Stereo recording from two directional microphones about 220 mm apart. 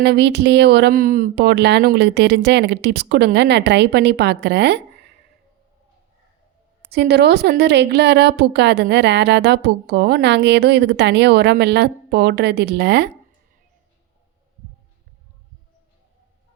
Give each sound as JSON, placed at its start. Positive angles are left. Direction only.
{"t": 0.0, "sound": "speech", "side_deg": -50}
{"t": 6.9, "sound": "speech", "side_deg": -50}